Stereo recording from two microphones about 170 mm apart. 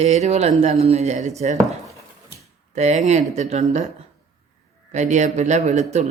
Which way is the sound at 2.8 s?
40° right (ahead or behind).